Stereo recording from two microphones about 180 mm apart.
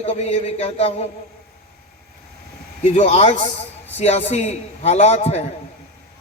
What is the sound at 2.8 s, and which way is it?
A man's voice, 40° left (ahead or behind).